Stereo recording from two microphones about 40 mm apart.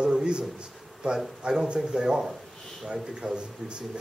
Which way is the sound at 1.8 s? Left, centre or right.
Centre.